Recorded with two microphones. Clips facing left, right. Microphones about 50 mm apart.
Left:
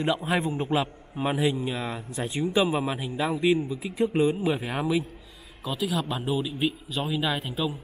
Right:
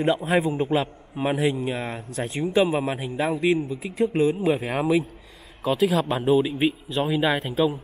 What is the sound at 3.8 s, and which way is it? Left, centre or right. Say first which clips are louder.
Speech: right 2 dB; centre.